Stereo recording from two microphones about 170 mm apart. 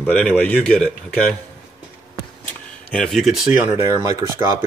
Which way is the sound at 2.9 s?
Centre (ahead or behind).